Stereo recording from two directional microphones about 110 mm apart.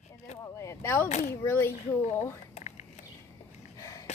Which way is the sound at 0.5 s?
25° left (ahead or behind).